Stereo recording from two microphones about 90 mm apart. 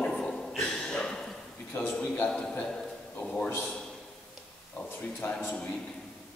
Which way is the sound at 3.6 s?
5° left (ahead or behind).